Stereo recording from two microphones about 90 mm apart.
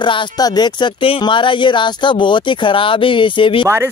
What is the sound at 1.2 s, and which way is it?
Speech, 65° left (ahead or behind).